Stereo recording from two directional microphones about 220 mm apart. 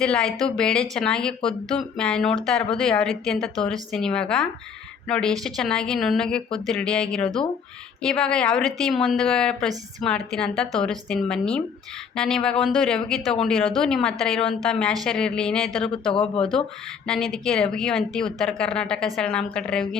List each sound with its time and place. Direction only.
0.0 s a woman's voice: 5° left (ahead or behind)
16.1 s speech: 25° left (ahead or behind)
17.1 s a woman's voice: centre (ahead or behind)